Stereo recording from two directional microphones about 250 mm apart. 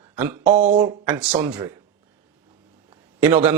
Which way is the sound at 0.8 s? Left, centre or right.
Centre.